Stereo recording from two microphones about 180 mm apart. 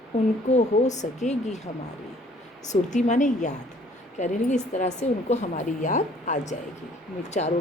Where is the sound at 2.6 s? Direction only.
40° left (ahead or behind).